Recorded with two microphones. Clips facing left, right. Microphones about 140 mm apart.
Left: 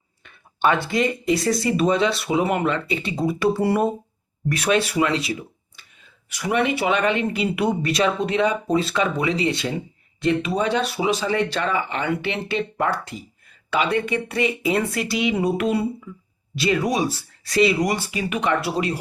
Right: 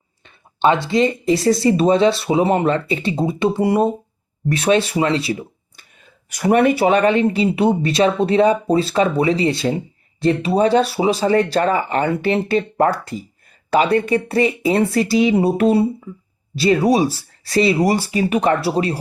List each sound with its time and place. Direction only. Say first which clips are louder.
0.3 s speech: right 4 dB; 25° right (ahead or behind)
6.3 s speech: right 7 dB; 45° right (ahead or behind)